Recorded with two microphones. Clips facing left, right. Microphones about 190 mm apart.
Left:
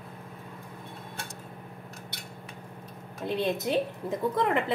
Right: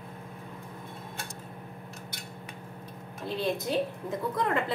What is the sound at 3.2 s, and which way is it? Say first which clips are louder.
Speech: left 2 dB; 20° left (ahead or behind).